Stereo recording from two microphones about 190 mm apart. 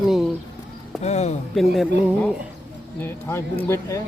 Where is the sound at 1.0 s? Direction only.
35° left (ahead or behind).